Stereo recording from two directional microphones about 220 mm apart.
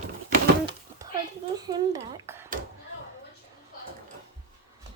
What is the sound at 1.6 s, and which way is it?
Speech, 15° right (ahead or behind).